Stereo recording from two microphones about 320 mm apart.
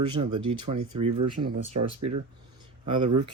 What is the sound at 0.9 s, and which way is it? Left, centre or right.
Speech, right.